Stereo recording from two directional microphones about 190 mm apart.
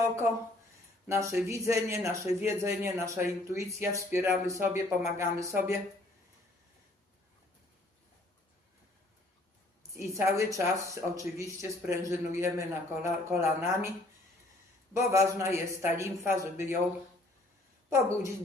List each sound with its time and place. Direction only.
1.0 s speech: 15° right (ahead or behind)
9.9 s speech: 15° right (ahead or behind)
14.9 s a woman's voice: 15° right (ahead or behind)